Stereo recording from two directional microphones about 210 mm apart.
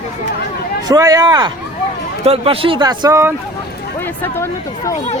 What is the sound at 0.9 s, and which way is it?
A man's voice, 15° right (ahead or behind).